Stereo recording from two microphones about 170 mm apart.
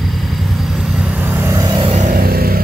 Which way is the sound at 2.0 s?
55° right (ahead or behind).